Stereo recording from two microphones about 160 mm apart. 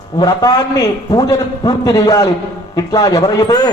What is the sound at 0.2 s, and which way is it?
A man's voice, 25° left (ahead or behind).